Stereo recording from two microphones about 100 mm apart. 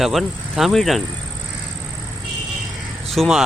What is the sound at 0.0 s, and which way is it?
Speech, centre (ahead or behind).